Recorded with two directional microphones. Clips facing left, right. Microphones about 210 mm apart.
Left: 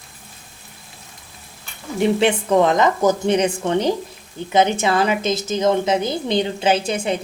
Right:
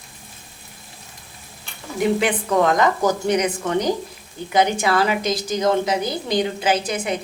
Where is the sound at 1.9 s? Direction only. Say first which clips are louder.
Left 3 dB; 25° left (ahead or behind).